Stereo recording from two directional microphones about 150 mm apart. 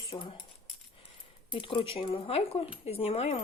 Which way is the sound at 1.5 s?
35° left (ahead or behind).